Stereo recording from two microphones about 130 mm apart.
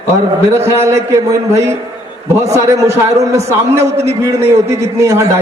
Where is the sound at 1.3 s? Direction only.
25° right (ahead or behind).